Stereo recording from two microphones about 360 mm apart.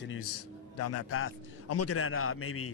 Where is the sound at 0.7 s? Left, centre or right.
Left.